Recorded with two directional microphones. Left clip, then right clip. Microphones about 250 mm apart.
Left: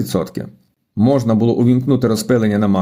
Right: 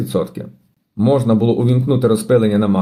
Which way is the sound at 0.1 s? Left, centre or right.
Left.